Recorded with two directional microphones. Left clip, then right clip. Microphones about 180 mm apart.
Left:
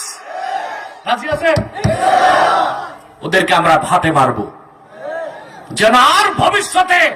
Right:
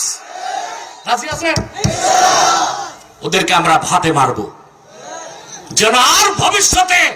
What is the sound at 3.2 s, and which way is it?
Speech, 55° left (ahead or behind).